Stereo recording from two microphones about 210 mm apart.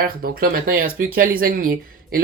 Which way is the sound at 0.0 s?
45° right (ahead or behind).